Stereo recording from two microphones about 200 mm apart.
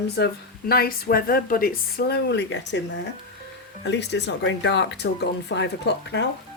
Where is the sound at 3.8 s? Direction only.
60° left (ahead or behind).